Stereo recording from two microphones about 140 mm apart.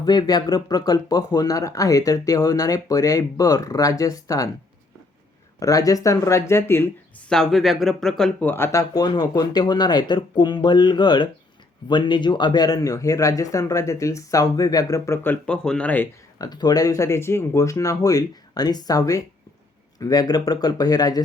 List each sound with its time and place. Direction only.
0.0 s speech: 30° left (ahead or behind)
5.5 s speech: 25° left (ahead or behind)
7.3 s speech: centre (ahead or behind)
16.4 s speech: 30° left (ahead or behind)